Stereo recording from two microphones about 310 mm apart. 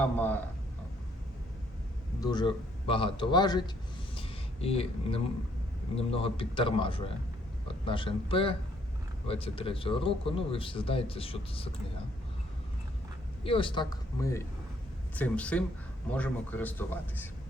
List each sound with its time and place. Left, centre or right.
0.0 s speech: centre
2.2 s a man's voice: centre
4.1 s a sound: centre
5.9 s a man's voice: centre
13.4 s a man's voice: centre